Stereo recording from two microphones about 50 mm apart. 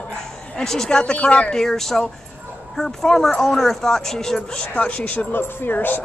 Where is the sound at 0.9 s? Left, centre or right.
Left.